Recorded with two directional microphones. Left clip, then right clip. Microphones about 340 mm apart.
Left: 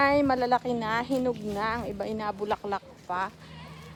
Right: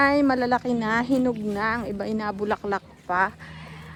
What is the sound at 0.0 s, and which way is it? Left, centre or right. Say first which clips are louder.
Speech: right 3 dB; right.